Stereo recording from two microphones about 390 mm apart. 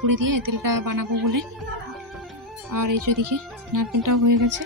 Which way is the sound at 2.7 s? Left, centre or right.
Right.